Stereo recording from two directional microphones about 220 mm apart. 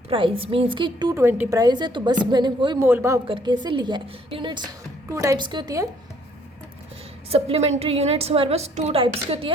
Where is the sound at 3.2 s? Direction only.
20° right (ahead or behind).